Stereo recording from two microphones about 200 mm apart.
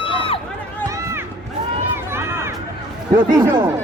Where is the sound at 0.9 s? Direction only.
15° right (ahead or behind).